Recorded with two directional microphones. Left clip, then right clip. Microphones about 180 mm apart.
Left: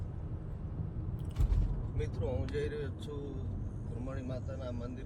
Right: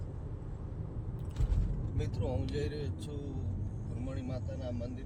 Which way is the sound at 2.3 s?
20° right (ahead or behind).